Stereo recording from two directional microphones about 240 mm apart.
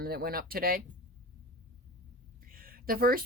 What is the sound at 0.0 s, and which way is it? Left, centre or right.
Speech, right.